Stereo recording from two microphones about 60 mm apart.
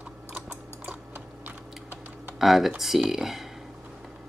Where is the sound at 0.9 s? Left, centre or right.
Right.